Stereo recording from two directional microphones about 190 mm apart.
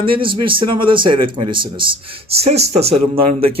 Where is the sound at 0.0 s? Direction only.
25° right (ahead or behind).